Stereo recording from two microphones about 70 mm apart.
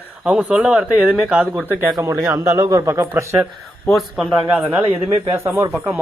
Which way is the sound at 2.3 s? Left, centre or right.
Right.